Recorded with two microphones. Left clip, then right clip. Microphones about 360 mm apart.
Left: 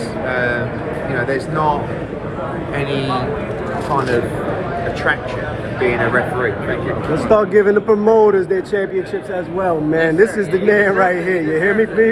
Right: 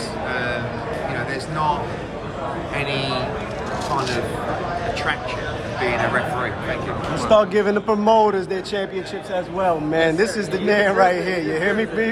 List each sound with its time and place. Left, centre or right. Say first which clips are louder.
0.3 s vehicle: left 7 dB; centre
7.2 s a man's voice: left 3 dB; centre